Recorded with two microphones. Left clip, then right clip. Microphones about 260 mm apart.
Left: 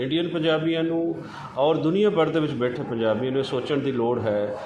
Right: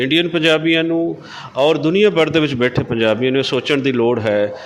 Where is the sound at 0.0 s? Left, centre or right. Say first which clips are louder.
Right 9 dB; right.